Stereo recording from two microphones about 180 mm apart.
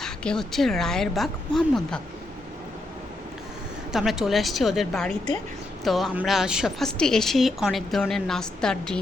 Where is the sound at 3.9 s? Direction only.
Centre (ahead or behind).